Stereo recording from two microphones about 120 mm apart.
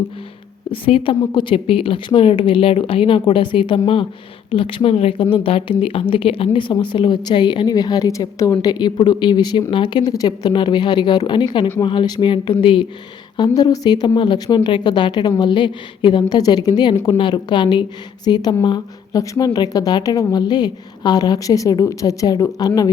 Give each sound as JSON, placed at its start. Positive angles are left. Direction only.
{"t": 0.7, "sound": "a woman's voice", "side_deg": 50}
{"t": 10.1, "sound": "a woman's voice", "side_deg": 30}